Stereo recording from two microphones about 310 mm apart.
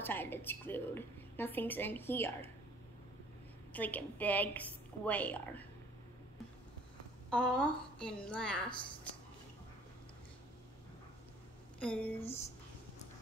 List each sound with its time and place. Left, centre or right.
0.0 s a woman's voice: centre
3.7 s a woman's voice: centre
7.2 s a woman's voice: centre
11.8 s a woman's voice: centre
12.2 s speech: centre